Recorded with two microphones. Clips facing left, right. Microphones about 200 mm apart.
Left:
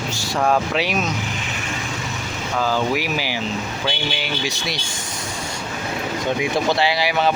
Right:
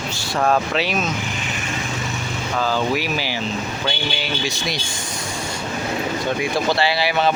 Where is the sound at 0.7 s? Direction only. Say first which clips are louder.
Even; 15° left (ahead or behind).